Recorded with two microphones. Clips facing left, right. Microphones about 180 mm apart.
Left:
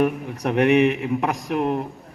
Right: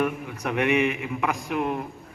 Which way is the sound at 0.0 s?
35° left (ahead or behind).